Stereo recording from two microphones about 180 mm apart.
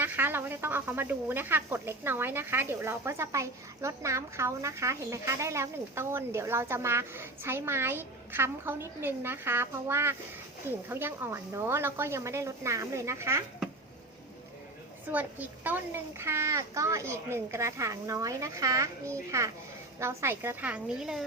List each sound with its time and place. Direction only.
0.0 s speech: 10° right (ahead or behind)
15.1 s speech: 10° right (ahead or behind)